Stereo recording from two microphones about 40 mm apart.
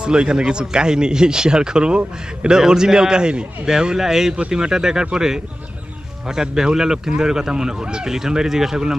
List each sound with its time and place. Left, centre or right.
0.0 s speech: right